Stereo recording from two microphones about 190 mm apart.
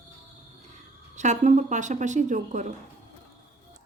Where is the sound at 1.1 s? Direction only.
40° right (ahead or behind).